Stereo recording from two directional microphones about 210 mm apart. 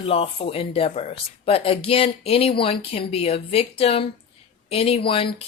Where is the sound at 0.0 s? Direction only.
25° left (ahead or behind).